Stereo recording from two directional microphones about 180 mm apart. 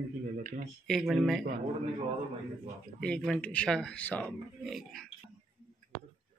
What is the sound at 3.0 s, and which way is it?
Speech, 5° left (ahead or behind).